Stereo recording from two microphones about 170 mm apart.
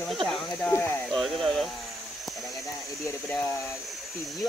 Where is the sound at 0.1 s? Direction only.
Centre (ahead or behind).